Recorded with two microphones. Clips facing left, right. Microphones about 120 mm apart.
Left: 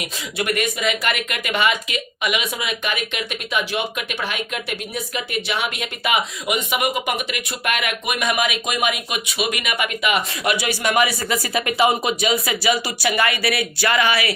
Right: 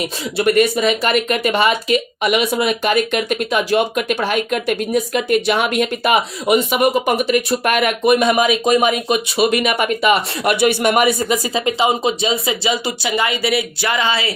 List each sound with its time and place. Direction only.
0.0 s speech: 35° right (ahead or behind)
10.5 s speech: 60° right (ahead or behind)
11.2 s speech: 20° right (ahead or behind)